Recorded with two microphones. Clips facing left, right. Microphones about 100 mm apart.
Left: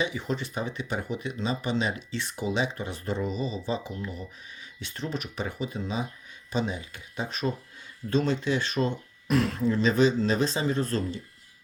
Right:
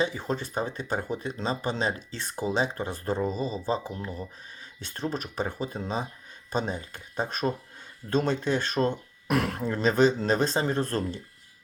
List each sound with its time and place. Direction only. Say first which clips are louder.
0.0 s speech: right 1 dB; 40° right (ahead or behind)